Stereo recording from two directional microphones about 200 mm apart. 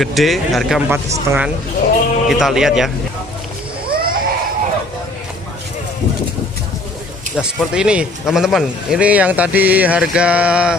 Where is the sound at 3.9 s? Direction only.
45° right (ahead or behind).